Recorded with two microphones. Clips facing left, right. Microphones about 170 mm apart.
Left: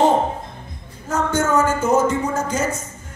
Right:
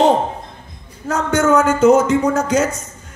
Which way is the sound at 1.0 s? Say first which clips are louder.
Right 4 dB; 70° right (ahead or behind).